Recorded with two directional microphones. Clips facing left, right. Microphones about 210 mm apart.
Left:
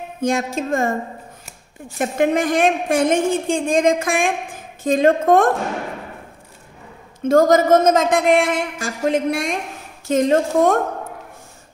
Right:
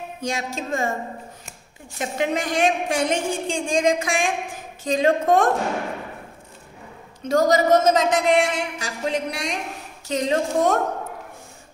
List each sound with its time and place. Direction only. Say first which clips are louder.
0.2 s a woman's voice: left 8 dB; 55° left (ahead or behind)
2.0 s a woman's voice: left 6 dB; 50° left (ahead or behind)
7.2 s a woman's voice: left 4 dB; 50° left (ahead or behind)